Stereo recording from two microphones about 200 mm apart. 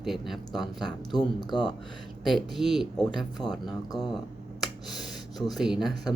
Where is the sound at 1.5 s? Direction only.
20° left (ahead or behind).